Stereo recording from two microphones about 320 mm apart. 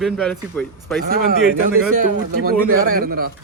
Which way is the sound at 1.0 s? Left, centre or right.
Right.